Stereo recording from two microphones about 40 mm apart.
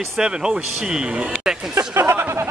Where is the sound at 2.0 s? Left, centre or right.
Right.